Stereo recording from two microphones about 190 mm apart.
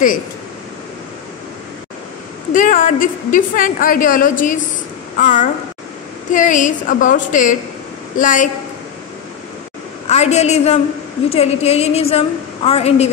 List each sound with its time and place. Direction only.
2.5 s a woman's voice: 45° left (ahead or behind)
10.0 s a woman's voice: 35° left (ahead or behind)